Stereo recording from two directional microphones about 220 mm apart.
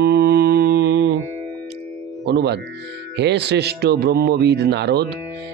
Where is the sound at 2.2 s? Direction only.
50° right (ahead or behind).